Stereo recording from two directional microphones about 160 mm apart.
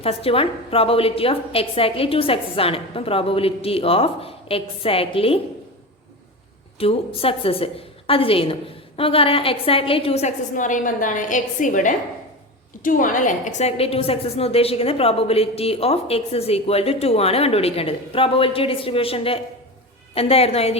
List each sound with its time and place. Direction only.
0.0 s a woman's voice: 35° left (ahead or behind)
6.7 s a woman's voice: 35° left (ahead or behind)